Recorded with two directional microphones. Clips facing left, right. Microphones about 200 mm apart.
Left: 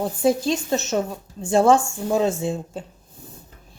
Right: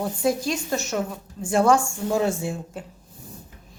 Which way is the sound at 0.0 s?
25° left (ahead or behind).